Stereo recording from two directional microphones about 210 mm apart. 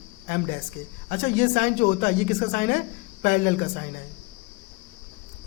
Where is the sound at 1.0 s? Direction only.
40° left (ahead or behind).